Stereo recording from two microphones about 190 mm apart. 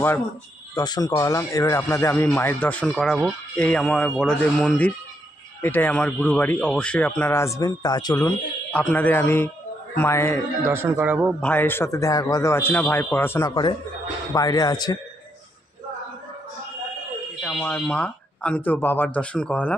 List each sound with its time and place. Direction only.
0.7 s a man's voice: 20° left (ahead or behind)
8.7 s a man's voice: 10° left (ahead or behind)
10.7 s a man's voice: 10° right (ahead or behind)
11.4 s a man's voice: 10° left (ahead or behind)
17.4 s a man's voice: 5° left (ahead or behind)